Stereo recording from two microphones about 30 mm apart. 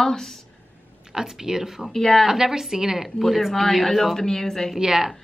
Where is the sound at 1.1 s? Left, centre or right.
Centre.